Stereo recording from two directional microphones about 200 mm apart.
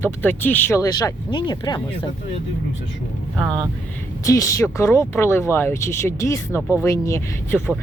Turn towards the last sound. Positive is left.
turn(degrees=10)  # may be behind; listen again after turning